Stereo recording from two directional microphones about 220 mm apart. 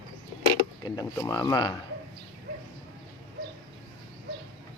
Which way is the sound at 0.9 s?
15° left (ahead or behind).